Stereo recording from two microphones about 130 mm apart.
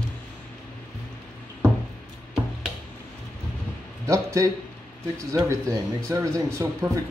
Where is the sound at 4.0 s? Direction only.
25° right (ahead or behind).